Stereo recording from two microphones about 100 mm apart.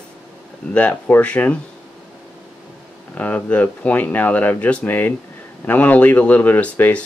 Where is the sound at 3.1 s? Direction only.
15° left (ahead or behind).